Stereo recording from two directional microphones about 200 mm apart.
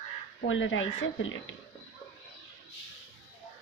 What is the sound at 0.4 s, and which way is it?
A woman's voice, 70° left (ahead or behind).